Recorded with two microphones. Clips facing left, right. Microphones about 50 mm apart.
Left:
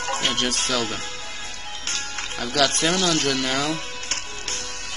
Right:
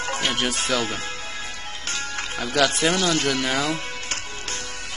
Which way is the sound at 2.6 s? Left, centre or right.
Right.